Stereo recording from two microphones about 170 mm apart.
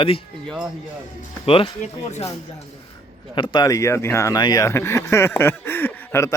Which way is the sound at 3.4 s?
25° left (ahead or behind).